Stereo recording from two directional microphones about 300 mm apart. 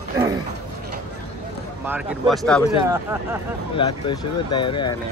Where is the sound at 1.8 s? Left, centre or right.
Centre.